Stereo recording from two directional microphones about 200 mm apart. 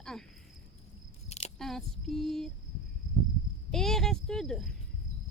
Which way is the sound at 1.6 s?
Centre (ahead or behind).